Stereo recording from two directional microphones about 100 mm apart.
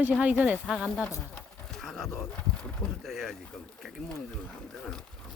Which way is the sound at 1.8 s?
5° left (ahead or behind).